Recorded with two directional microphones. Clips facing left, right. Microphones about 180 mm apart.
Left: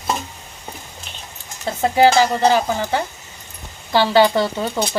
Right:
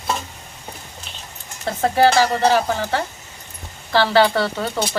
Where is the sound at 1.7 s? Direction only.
15° left (ahead or behind).